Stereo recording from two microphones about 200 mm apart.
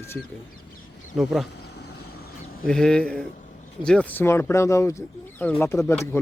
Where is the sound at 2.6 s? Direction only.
5° left (ahead or behind).